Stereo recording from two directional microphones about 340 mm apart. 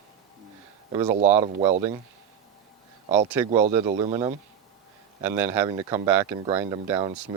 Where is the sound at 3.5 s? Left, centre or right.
Centre.